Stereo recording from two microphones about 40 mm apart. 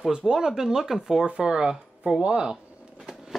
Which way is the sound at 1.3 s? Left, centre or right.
Right.